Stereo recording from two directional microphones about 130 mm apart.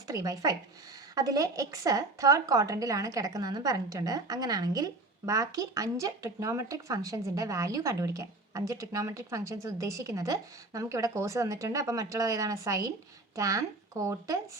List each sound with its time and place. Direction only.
0.1 s a woman's voice: 25° right (ahead or behind)